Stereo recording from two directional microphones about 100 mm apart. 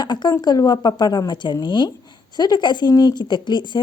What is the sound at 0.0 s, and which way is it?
A woman's voice, 45° left (ahead or behind).